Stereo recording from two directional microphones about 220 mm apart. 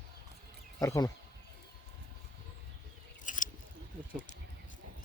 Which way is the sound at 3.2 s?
35° left (ahead or behind).